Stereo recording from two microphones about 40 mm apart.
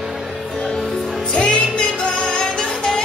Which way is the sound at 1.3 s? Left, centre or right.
Left.